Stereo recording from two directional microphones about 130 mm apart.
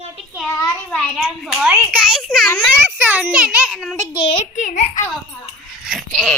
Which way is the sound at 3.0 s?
15° right (ahead or behind).